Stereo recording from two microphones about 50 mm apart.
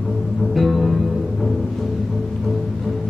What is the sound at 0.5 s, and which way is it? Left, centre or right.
Music, centre.